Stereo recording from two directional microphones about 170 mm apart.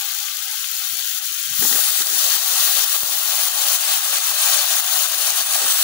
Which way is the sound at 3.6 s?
15° left (ahead or behind).